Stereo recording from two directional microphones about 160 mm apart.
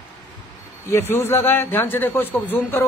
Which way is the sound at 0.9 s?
15° left (ahead or behind).